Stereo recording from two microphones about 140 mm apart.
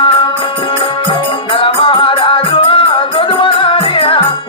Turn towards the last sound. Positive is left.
turn(degrees=40)  # may be behind; listen again after turning